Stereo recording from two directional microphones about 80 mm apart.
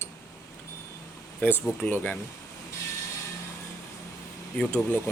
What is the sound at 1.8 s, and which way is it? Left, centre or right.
Speech, left.